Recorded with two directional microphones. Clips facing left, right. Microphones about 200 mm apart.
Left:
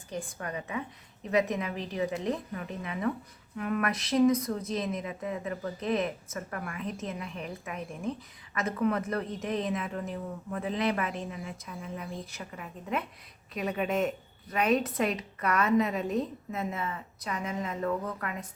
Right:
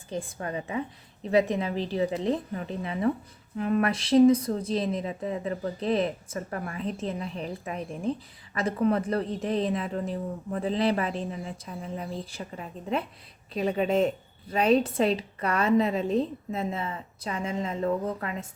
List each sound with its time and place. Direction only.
0.1 s a woman's voice: 30° right (ahead or behind)